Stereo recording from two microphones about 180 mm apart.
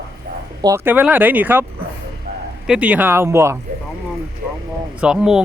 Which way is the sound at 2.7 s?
5° right (ahead or behind).